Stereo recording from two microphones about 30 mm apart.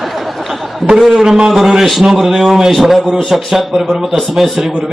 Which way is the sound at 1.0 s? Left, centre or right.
Centre.